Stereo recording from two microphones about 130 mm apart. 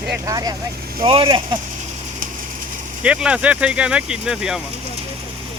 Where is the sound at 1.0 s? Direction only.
40° right (ahead or behind).